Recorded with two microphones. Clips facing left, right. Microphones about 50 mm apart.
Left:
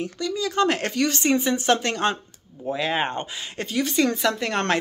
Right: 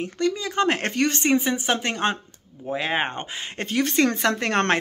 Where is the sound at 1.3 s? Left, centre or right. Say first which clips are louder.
Left 1 dB; right.